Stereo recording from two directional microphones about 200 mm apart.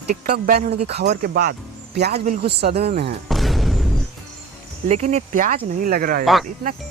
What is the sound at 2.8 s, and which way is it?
Speech, 30° right (ahead or behind).